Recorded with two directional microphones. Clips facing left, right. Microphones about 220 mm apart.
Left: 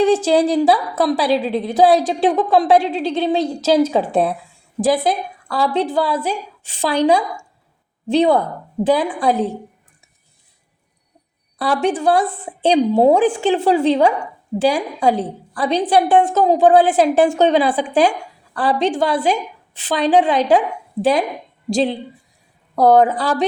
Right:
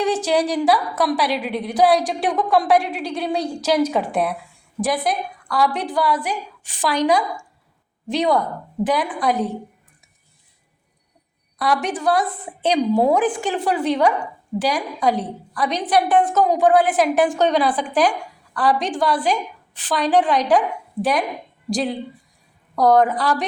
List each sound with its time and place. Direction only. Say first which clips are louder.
0.0 s a woman's voice: left 5 dB; 30° left (ahead or behind)
11.5 s a woman's voice: left 4 dB; 30° left (ahead or behind)